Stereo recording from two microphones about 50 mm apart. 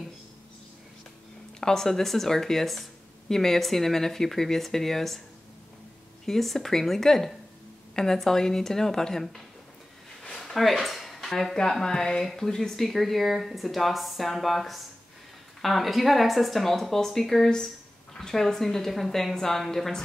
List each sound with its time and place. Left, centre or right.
1.6 s speech: centre
6.2 s speech: centre
10.2 s a sound: centre
11.5 s speech: centre